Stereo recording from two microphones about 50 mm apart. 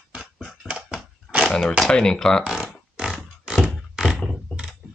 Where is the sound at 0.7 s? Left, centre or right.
Centre.